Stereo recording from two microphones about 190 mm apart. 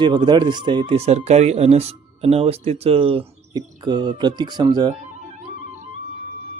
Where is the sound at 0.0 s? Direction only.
25° right (ahead or behind).